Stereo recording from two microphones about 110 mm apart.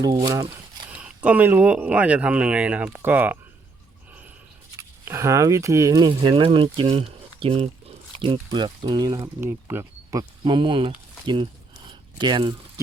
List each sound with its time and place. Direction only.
0.0 s speech: 35° right (ahead or behind)
0.9 s speech: 10° right (ahead or behind)
5.0 s speech: 25° right (ahead or behind)
6.1 s speech: 50° right (ahead or behind)
8.2 s speech: 45° right (ahead or behind)
9.4 s speech: 20° right (ahead or behind)
10.4 s speech: 50° right (ahead or behind)
11.9 s a sound: 45° right (ahead or behind)